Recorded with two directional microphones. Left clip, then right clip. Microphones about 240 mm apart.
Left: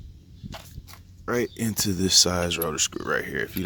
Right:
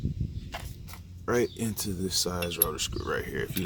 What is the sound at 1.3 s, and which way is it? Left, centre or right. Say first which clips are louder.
Speech: left 1 dB; left.